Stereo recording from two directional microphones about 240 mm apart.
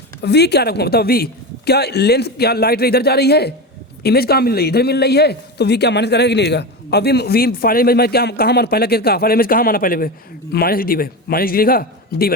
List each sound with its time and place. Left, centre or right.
0.2 s a man's voice: left